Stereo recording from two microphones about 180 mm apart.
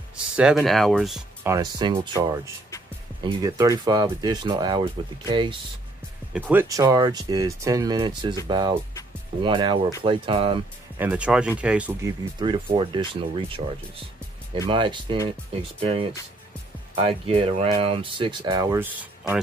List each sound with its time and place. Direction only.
0.1 s speech: 5° right (ahead or behind)
1.4 s speech: 20° right (ahead or behind)
6.5 s speech: 15° right (ahead or behind)
11.0 s speech: 10° right (ahead or behind)
12.0 s speech: 20° right (ahead or behind)
14.7 s speech: 25° right (ahead or behind); by 19.4 s 10° right (ahead or behind)